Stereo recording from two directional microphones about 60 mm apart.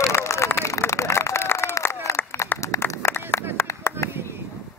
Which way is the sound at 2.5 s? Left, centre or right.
Left.